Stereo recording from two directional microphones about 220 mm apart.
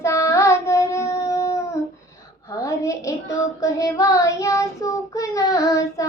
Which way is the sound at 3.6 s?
15° left (ahead or behind).